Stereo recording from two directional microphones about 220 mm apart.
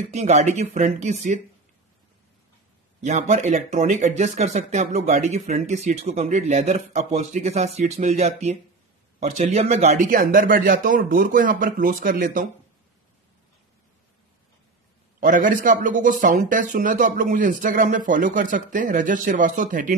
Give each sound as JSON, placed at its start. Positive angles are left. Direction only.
{"t": 0.1, "sound": "speech", "side_deg": -30}
{"t": 3.0, "sound": "speech", "side_deg": -30}
{"t": 15.1, "sound": "speech", "side_deg": -35}